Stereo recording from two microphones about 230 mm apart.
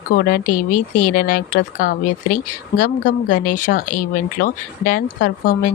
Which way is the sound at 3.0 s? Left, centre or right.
Left.